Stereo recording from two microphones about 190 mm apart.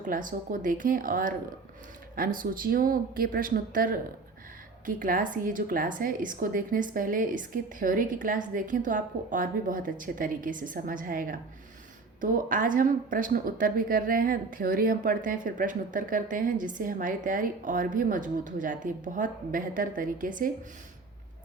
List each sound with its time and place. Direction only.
0.0 s speech: 45° right (ahead or behind)